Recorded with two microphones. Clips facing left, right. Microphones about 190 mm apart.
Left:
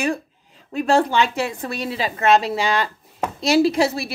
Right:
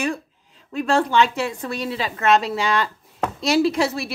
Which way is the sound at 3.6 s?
35° left (ahead or behind).